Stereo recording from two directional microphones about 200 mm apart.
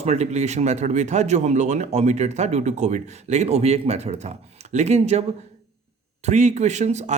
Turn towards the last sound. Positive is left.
turn(degrees=-35)  # may be behind; listen again after turning